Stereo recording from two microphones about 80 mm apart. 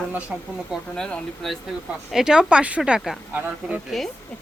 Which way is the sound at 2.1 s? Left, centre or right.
Centre.